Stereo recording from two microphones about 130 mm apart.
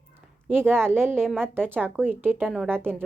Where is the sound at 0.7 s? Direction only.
20° right (ahead or behind).